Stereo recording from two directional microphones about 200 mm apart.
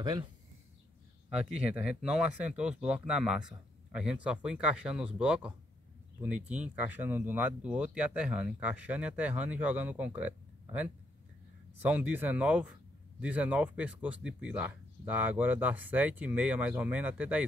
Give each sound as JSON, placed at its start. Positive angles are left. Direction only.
{"t": 0.0, "sound": "speech", "side_deg": -20}
{"t": 1.3, "sound": "speech", "side_deg": -5}